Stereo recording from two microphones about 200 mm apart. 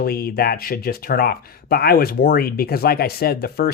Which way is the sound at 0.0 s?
50° left (ahead or behind).